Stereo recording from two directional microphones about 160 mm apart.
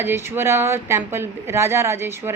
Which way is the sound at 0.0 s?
15° right (ahead or behind).